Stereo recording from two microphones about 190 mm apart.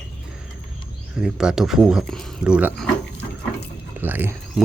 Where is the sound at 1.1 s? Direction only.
5° right (ahead or behind).